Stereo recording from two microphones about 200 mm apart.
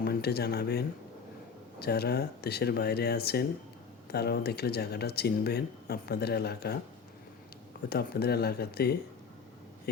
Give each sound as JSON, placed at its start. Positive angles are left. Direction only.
{"t": 0.0, "sound": "speech", "side_deg": 50}
{"t": 7.9, "sound": "speech", "side_deg": 50}